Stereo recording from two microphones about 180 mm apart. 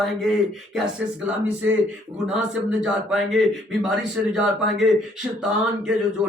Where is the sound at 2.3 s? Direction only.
5° right (ahead or behind).